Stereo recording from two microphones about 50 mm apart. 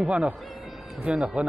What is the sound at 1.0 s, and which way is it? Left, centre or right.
Speech, right.